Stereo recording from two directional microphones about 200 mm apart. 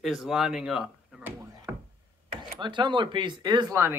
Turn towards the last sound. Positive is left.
turn(degrees=-15)  # may be behind; listen again after turning